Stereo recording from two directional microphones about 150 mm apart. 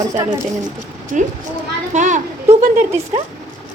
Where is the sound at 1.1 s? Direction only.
60° right (ahead or behind).